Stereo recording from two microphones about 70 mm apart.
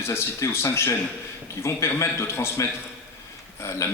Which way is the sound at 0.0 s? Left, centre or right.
Left.